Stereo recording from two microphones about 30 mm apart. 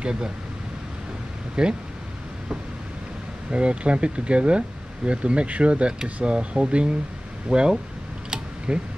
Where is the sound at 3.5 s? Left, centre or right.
Right.